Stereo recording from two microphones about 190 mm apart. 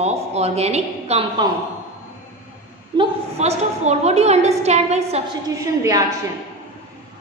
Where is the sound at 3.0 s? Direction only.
35° right (ahead or behind).